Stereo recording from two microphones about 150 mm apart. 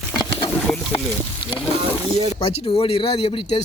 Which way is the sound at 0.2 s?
30° left (ahead or behind).